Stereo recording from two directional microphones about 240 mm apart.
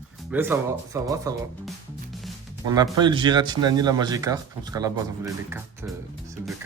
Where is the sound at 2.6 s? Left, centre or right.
Centre.